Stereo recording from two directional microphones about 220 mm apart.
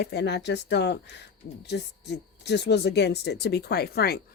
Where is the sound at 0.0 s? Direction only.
50° left (ahead or behind).